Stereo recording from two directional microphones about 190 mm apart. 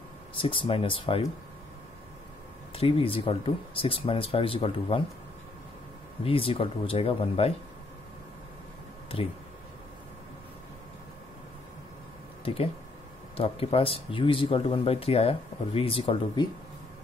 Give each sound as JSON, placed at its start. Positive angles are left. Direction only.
{"t": 0.4, "sound": "speech", "side_deg": 30}
{"t": 2.7, "sound": "speech", "side_deg": 30}
{"t": 6.2, "sound": "speech", "side_deg": 30}
{"t": 13.4, "sound": "speech", "side_deg": 30}